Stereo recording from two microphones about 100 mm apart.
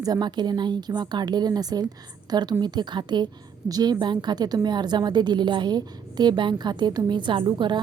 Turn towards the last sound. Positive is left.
turn(degrees=-50)  # may be behind; listen again after turning